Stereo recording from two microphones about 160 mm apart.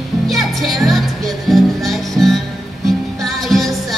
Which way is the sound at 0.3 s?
Centre (ahead or behind).